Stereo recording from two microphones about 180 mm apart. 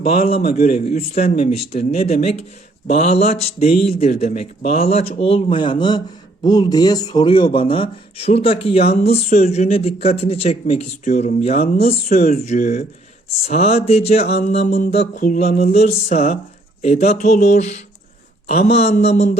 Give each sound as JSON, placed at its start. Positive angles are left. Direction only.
{"t": 0.0, "sound": "speech", "side_deg": 35}